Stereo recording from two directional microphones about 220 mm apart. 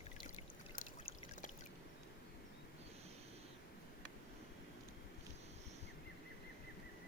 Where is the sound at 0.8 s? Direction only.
35° left (ahead or behind).